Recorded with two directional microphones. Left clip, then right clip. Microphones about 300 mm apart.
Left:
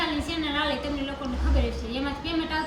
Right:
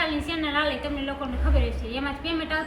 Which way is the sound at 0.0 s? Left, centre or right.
Centre.